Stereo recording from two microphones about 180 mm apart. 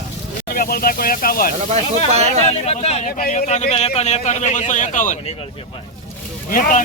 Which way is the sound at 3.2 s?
45° left (ahead or behind).